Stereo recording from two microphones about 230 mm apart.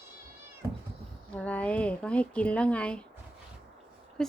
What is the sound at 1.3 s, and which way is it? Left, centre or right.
Speech, centre.